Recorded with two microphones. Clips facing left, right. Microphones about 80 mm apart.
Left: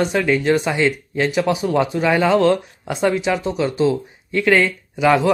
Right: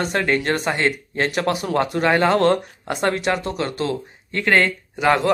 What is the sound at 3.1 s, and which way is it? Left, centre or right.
Speech, right.